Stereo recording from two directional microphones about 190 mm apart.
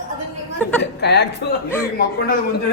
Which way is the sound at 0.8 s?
65° left (ahead or behind).